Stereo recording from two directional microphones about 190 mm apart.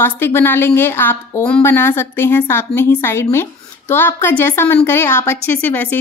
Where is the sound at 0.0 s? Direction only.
10° left (ahead or behind).